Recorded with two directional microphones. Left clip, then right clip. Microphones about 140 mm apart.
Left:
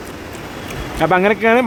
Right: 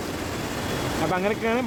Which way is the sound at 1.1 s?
60° left (ahead or behind).